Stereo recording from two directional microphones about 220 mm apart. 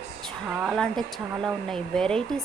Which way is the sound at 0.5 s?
Centre (ahead or behind).